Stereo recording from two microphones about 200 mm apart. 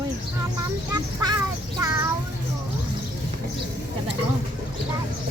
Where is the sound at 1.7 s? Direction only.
15° right (ahead or behind).